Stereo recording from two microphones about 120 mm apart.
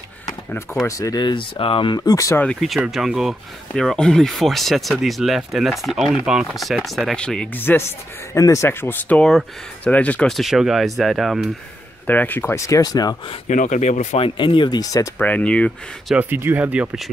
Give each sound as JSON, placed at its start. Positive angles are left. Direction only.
{"t": 0.8, "sound": "speech", "side_deg": 30}
{"t": 2.4, "sound": "speech", "side_deg": 5}
{"t": 12.1, "sound": "speech", "side_deg": 15}
{"t": 13.5, "sound": "speech", "side_deg": 85}
{"t": 14.2, "sound": "speech", "side_deg": 45}
{"t": 15.1, "sound": "speech", "side_deg": 10}
{"t": 16.2, "sound": "speech", "side_deg": -15}